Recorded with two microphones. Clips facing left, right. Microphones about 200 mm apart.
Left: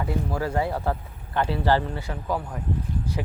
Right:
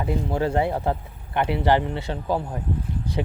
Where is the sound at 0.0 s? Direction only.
25° right (ahead or behind).